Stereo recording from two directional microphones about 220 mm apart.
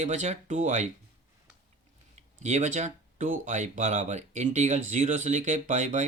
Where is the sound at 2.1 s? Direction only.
30° right (ahead or behind).